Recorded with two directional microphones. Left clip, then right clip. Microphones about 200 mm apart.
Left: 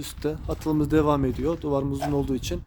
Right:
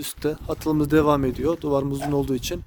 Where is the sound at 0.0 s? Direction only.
5° right (ahead or behind).